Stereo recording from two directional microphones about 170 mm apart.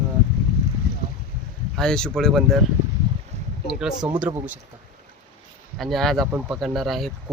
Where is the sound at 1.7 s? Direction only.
5° left (ahead or behind).